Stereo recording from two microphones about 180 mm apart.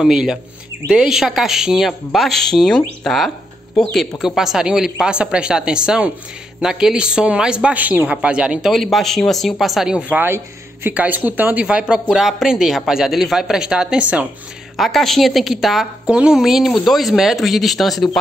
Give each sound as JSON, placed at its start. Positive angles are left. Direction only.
{"t": 0.0, "sound": "a man's voice", "side_deg": -5}